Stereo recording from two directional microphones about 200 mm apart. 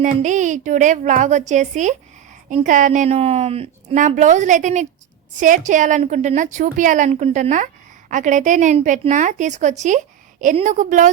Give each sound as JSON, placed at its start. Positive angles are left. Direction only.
{"t": 0.0, "sound": "a woman's voice", "side_deg": -40}